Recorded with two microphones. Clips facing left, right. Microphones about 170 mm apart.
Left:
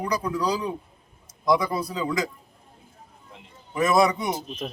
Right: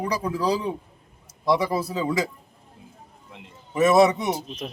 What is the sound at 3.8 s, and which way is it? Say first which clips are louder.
Speech: right 3 dB; 25° right (ahead or behind).